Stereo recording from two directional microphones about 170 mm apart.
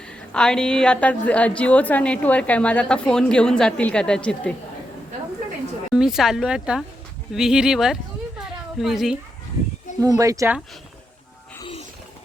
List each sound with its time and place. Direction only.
0.3 s a woman's voice: 5° left (ahead or behind)
5.9 s speech: 5° right (ahead or behind)
10.0 s speech: 20° right (ahead or behind)